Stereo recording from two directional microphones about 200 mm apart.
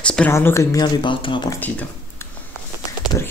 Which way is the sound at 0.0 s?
5° left (ahead or behind).